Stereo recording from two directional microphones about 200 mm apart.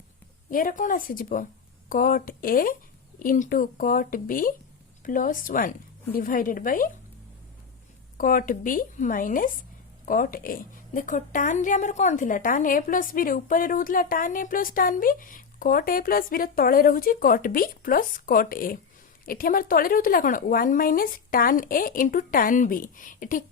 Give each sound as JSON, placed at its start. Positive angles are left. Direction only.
{"t": 0.5, "sound": "a woman's voice", "side_deg": 40}
{"t": 8.2, "sound": "a woman's voice", "side_deg": 45}